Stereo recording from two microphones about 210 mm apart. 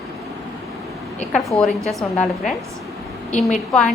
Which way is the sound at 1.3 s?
Centre (ahead or behind).